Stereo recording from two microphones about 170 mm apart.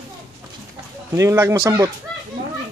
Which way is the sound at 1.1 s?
20° right (ahead or behind).